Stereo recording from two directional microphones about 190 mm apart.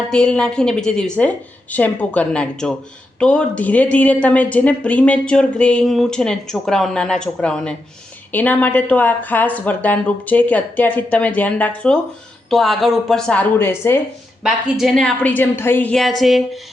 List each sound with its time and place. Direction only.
0.1 s a woman's voice: 5° left (ahead or behind)
14.4 s a woman's voice: centre (ahead or behind)